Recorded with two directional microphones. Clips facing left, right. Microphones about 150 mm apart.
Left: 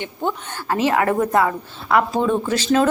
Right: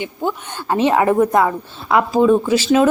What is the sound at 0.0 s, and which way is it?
A woman's voice, 15° right (ahead or behind).